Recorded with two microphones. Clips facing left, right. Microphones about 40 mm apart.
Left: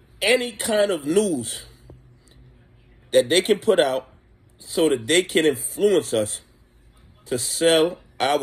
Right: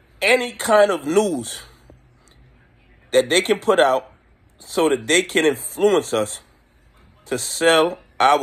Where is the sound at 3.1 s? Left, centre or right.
Right.